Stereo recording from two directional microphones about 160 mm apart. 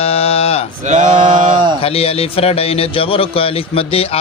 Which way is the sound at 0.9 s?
55° right (ahead or behind).